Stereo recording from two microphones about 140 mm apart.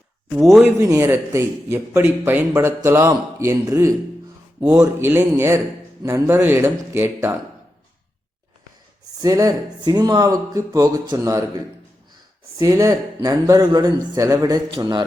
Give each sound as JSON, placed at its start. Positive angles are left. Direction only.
{"t": 0.6, "sound": "speech", "side_deg": -20}
{"t": 9.2, "sound": "speech", "side_deg": -25}
{"t": 12.5, "sound": "a man's voice", "side_deg": -25}